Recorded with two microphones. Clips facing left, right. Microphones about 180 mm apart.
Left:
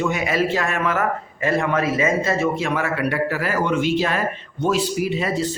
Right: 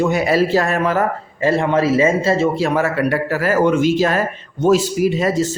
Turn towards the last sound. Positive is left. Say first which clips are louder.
# right 6 dB
turn(degrees=-40)  # may be behind; listen again after turning